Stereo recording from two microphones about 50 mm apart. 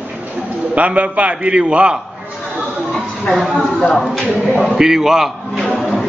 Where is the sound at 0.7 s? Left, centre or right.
Right.